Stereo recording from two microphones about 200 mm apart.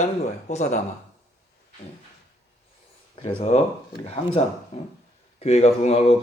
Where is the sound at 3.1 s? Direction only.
25° left (ahead or behind).